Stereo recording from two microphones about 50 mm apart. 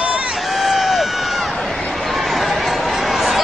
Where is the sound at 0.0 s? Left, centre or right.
Right.